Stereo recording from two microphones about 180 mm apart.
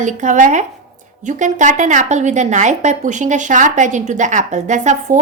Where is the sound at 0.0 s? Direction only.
45° right (ahead or behind).